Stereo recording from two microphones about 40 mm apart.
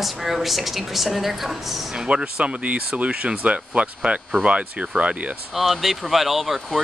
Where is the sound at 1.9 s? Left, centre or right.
Right.